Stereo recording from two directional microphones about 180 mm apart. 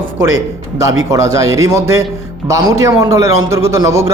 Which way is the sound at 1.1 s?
15° right (ahead or behind).